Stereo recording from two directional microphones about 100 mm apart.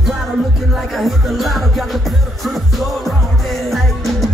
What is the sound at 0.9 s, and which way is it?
Music, centre (ahead or behind).